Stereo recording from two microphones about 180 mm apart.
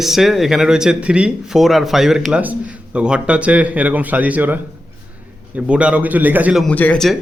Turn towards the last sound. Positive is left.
turn(degrees=5)  # may be behind; listen again after turning